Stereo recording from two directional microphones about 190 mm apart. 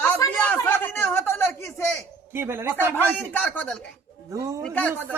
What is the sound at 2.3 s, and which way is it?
Speech, 10° right (ahead or behind).